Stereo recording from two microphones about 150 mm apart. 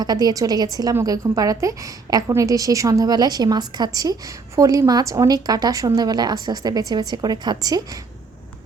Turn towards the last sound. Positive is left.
turn(degrees=-25)  # may be behind; listen again after turning